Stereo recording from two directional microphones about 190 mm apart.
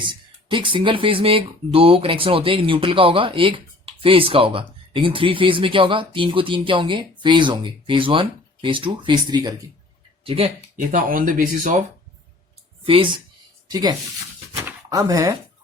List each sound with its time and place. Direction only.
0.0 s speech: 25° right (ahead or behind)
10.8 s speech: 45° right (ahead or behind)
12.8 s speech: 25° right (ahead or behind)
14.5 s a sound: 15° right (ahead or behind)